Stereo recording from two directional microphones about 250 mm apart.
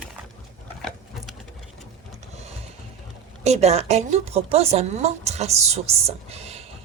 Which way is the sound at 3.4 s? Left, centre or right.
Right.